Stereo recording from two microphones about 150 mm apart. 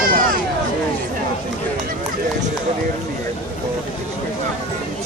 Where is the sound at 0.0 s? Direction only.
70° right (ahead or behind).